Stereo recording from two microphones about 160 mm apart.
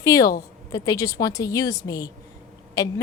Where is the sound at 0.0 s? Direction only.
20° left (ahead or behind).